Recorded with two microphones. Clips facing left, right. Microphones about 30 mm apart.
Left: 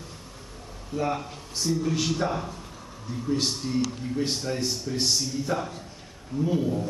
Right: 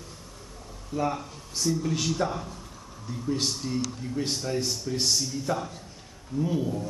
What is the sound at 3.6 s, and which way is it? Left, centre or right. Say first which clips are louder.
A man's voice: left 3 dB; centre.